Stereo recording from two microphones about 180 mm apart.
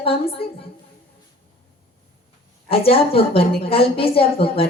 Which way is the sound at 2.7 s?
30° left (ahead or behind).